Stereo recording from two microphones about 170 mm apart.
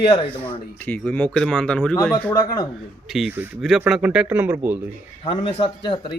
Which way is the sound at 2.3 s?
20° left (ahead or behind).